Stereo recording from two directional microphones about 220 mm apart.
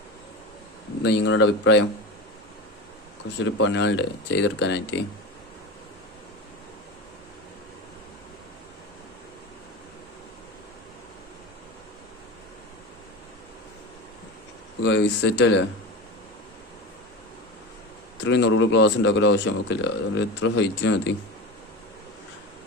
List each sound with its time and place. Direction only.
1.0 s a man's voice: 55° left (ahead or behind)
3.4 s speech: 55° left (ahead or behind)
14.8 s a man's voice: 55° left (ahead or behind)
18.2 s a man's voice: 55° left (ahead or behind)